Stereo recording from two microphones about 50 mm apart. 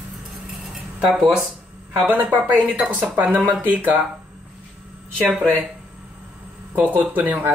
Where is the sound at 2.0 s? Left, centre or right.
Right.